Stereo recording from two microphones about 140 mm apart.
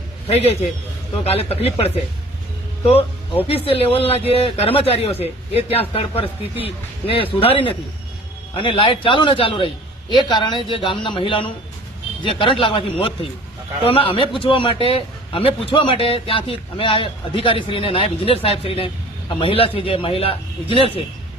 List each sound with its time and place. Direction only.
0.3 s speech: 45° left (ahead or behind)
3.4 s a man's voice: 40° left (ahead or behind)